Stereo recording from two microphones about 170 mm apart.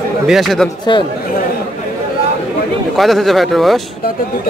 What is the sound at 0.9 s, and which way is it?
Speech, 25° left (ahead or behind).